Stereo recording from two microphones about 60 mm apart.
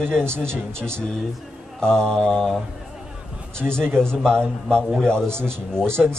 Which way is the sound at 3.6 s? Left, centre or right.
Right.